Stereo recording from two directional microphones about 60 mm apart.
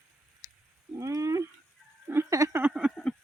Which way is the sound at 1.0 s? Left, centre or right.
Right.